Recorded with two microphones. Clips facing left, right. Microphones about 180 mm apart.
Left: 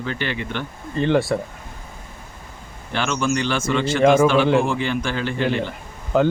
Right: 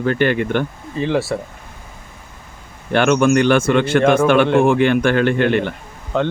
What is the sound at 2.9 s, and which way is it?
Speech, 60° right (ahead or behind).